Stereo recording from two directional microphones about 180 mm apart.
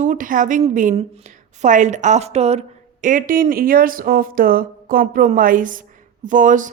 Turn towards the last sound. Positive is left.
turn(degrees=-45)  # may be behind; listen again after turning